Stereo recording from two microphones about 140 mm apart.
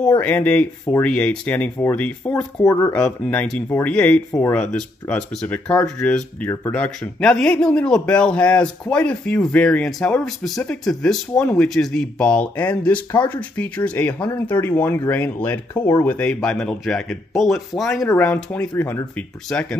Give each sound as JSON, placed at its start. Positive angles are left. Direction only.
{"t": 0.0, "sound": "speech", "side_deg": 10}
{"t": 2.6, "sound": "speech", "side_deg": 25}
{"t": 2.9, "sound": "speech", "side_deg": 10}